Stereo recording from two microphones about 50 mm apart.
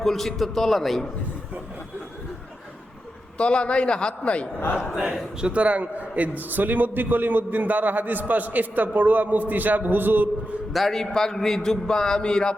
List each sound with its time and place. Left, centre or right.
0.0 s a man's voice: centre
3.3 s a man's voice: left
4.8 s a man's voice: centre
5.4 s a man's voice: right
10.7 s a man's voice: centre